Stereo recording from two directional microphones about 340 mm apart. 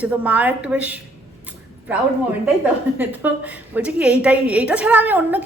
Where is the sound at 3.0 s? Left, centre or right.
Centre.